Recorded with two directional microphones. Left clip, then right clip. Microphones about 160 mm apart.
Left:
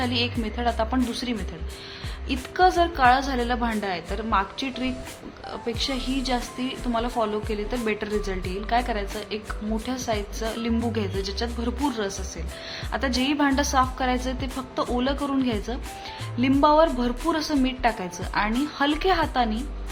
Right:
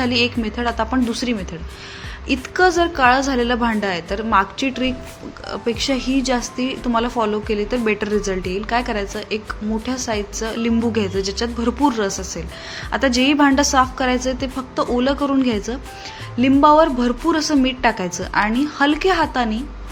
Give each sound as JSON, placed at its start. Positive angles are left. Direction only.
{"t": 0.0, "sound": "a woman's voice", "side_deg": -15}